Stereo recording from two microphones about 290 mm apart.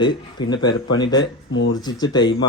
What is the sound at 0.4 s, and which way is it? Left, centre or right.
A man's voice, centre.